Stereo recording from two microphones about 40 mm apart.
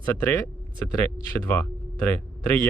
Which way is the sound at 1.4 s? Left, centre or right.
Left.